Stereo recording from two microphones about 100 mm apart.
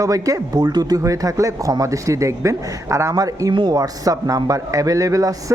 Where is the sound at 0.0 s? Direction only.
35° right (ahead or behind).